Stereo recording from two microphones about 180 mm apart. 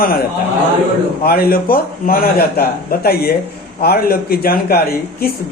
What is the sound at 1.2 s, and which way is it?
A man's voice, 55° left (ahead or behind).